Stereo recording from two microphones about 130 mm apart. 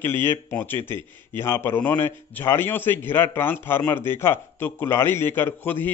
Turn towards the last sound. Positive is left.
turn(degrees=15)  # may be behind; listen again after turning